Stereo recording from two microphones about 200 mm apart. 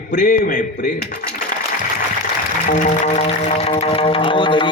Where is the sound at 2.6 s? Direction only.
40° left (ahead or behind).